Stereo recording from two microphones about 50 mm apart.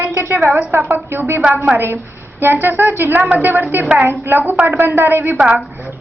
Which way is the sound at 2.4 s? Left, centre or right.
Right.